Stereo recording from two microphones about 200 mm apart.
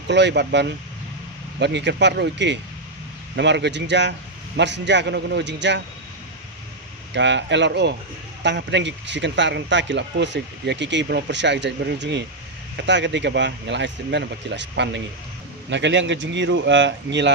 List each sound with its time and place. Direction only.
0.1 s speech: 60° right (ahead or behind)
7.1 s speech: 60° right (ahead or behind)